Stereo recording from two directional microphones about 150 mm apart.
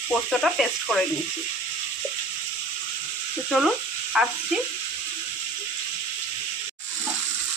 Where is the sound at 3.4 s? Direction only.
5° right (ahead or behind).